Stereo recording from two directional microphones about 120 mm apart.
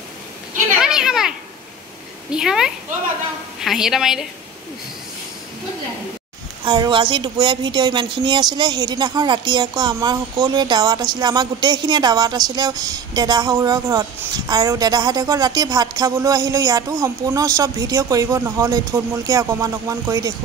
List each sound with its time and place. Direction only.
0.7 s children playing: 5° right (ahead or behind)
2.3 s a woman's voice: 5° right (ahead or behind)
6.6 s a woman's voice: 35° right (ahead or behind)